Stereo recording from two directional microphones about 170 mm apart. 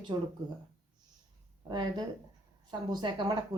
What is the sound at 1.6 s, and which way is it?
A woman's voice, 25° right (ahead or behind).